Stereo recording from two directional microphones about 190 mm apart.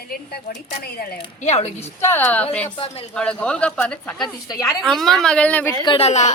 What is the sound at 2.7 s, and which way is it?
Speech, 30° left (ahead or behind).